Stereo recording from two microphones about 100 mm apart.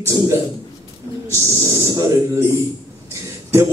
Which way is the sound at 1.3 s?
30° right (ahead or behind).